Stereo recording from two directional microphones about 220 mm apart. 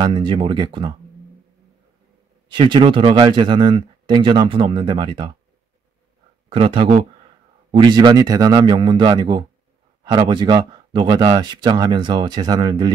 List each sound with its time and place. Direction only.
0.0 s speech: 20° right (ahead or behind)
2.5 s speech: 20° right (ahead or behind)
6.5 s speech: 25° right (ahead or behind)